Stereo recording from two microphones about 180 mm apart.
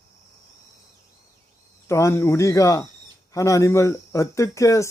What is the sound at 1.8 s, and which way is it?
Speech, 15° left (ahead or behind).